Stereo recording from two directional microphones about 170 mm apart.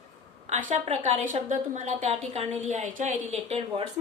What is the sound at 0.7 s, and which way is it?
A woman's voice, 40° right (ahead or behind).